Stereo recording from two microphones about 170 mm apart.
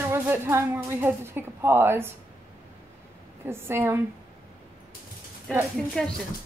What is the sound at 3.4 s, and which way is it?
Speech, 15° right (ahead or behind).